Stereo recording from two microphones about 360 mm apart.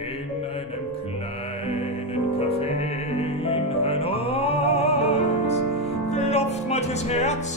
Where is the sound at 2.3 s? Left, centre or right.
Centre.